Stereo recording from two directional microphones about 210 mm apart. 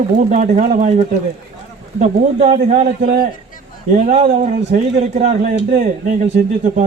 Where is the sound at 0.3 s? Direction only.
35° right (ahead or behind).